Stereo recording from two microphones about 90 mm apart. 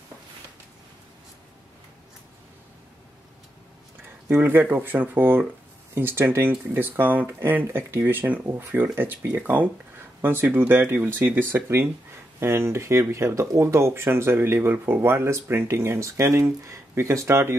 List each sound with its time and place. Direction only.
4.3 s speech: 25° right (ahead or behind)